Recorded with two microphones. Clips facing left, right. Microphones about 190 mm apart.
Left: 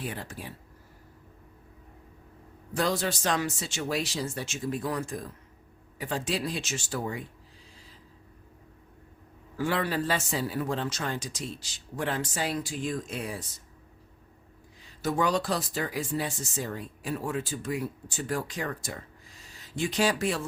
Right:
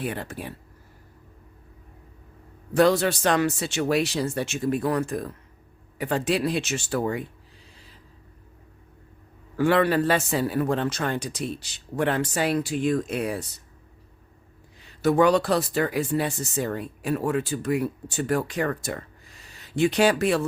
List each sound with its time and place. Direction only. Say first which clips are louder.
0.0 s speech: right 6 dB; 60° right (ahead or behind)
2.7 s speech: right 9 dB; 65° right (ahead or behind)
9.6 s speech: right 8 dB; 65° right (ahead or behind)
14.8 s speech: right 8 dB; 65° right (ahead or behind)